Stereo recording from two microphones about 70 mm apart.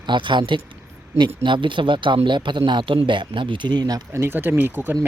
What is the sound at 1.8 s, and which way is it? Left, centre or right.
Speech, right.